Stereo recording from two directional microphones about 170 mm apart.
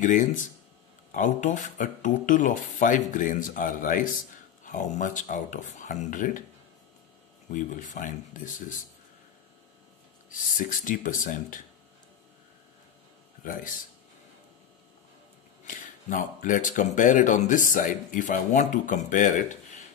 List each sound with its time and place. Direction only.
0.0 s speech: 50° left (ahead or behind)
7.4 s speech: 50° left (ahead or behind)
10.6 s speech: 55° left (ahead or behind)
13.4 s speech: 55° left (ahead or behind)
15.6 s speech: 50° left (ahead or behind)